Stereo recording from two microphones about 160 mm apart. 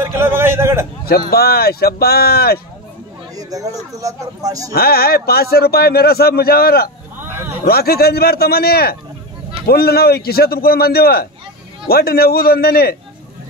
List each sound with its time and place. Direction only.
0.0 s a sound: 15° right (ahead or behind)
1.3 s a man's voice: 75° left (ahead or behind)
3.3 s speech: 20° right (ahead or behind)
4.7 s a man's voice: 75° left (ahead or behind)
7.2 s a sound: 15° right (ahead or behind)
7.6 s a man's voice: 75° left (ahead or behind)